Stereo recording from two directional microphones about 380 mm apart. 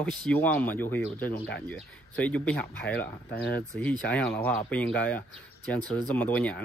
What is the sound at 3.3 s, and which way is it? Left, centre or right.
Speech, left.